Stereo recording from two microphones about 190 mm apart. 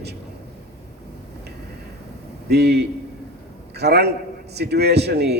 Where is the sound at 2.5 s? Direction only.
60° right (ahead or behind).